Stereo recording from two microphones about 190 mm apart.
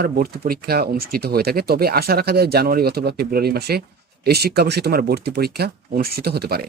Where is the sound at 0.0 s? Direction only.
50° right (ahead or behind).